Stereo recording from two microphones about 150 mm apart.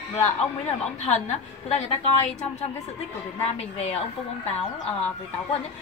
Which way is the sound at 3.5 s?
45° left (ahead or behind).